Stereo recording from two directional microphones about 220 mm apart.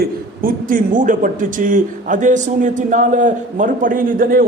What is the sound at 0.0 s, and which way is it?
A man's voice, 40° right (ahead or behind).